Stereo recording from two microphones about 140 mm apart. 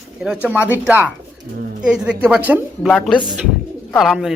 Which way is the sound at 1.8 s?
5° right (ahead or behind).